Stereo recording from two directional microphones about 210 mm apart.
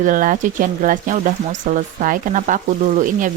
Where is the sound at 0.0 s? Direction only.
40° right (ahead or behind).